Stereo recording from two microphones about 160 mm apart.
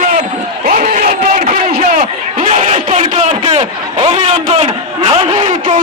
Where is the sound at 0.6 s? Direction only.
60° right (ahead or behind).